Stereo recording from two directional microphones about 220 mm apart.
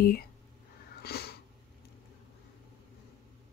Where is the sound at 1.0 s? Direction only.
45° left (ahead or behind).